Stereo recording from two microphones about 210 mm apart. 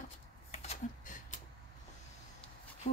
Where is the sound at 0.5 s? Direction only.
30° left (ahead or behind).